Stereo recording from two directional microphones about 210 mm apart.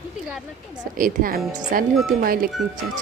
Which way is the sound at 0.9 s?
40° right (ahead or behind).